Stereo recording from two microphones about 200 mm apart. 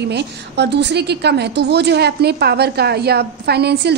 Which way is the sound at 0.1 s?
55° right (ahead or behind).